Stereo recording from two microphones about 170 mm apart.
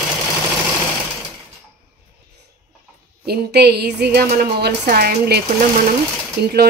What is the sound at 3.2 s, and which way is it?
Speech, 70° right (ahead or behind).